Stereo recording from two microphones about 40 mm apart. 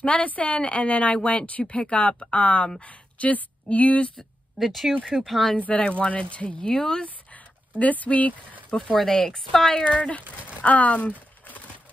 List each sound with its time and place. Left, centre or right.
0.0 s speech: left
4.2 s speech: centre
5.7 s speech: left
6.7 s a woman's voice: centre
7.8 s speech: left
8.9 s a woman's voice: centre
9.8 s speech: left
10.6 s a sound: left